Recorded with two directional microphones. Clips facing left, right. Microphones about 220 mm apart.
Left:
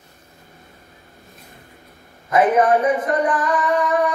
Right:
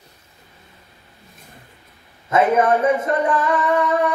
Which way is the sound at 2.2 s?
25° right (ahead or behind).